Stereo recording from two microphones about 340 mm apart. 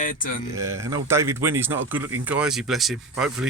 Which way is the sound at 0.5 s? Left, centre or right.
Centre.